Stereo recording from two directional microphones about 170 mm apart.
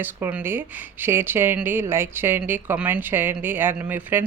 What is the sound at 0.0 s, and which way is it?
Speech, 10° right (ahead or behind).